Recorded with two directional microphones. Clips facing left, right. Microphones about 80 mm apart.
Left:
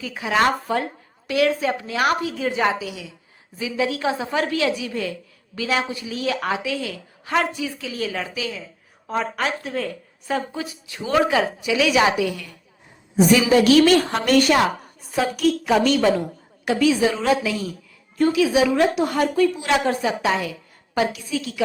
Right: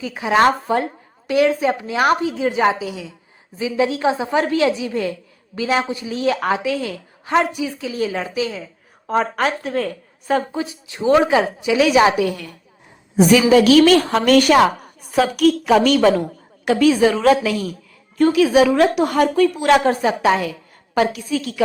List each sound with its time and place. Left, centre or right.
0.0 s a woman's voice: right
1.3 s a woman's voice: right
2.4 s a woman's voice: centre; by 7.3 s right
7.3 s a woman's voice: right
9.0 s a woman's voice: right
10.5 s a woman's voice: right
14.2 s a woman's voice: right
15.1 s a woman's voice: right
16.6 s a woman's voice: right